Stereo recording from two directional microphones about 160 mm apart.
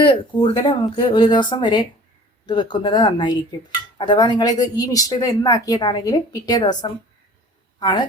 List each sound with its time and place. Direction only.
0.0 s speech: 30° left (ahead or behind)